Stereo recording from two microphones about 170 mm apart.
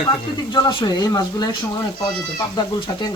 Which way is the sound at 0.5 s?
25° left (ahead or behind).